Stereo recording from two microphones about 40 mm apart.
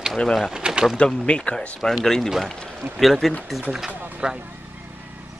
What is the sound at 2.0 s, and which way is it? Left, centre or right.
Speech, centre.